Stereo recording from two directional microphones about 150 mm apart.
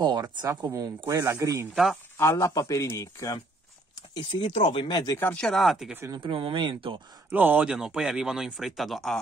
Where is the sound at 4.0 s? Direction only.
30° left (ahead or behind).